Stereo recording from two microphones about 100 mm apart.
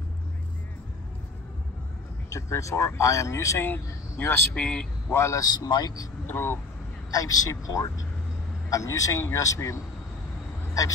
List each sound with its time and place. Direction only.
2.2 s speech: 30° left (ahead or behind); by 4.8 s 10° left (ahead or behind)
5.1 s speech: 30° left (ahead or behind)
5.5 s speech: 40° left (ahead or behind)
6.2 s speech: 25° left (ahead or behind)
7.1 s speech: 40° left (ahead or behind)